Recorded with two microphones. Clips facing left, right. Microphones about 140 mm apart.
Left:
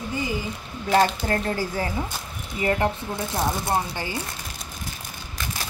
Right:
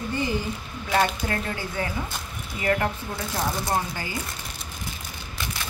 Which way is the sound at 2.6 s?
25° left (ahead or behind).